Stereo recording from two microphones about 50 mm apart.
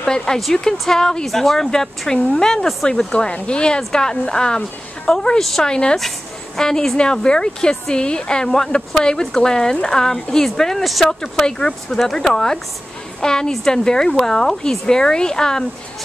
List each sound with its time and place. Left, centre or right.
0.0 s speech: centre
3.1 s speech: left
5.4 s speech: centre
5.7 s speech: centre
5.9 s speech: centre
11.1 s speech: centre